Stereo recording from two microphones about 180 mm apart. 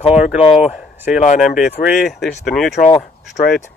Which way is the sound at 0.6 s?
5° right (ahead or behind).